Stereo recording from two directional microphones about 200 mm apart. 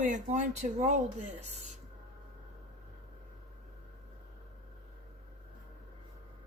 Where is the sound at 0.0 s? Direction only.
35° right (ahead or behind).